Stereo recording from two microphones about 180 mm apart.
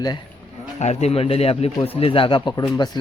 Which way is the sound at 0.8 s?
40° left (ahead or behind).